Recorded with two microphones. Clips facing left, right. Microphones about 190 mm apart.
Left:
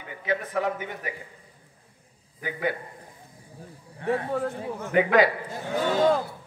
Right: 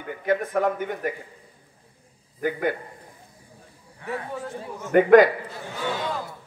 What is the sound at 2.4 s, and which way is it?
Speech, 50° right (ahead or behind).